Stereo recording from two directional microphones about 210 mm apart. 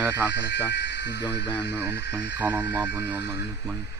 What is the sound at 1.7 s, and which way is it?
Speech, 10° right (ahead or behind).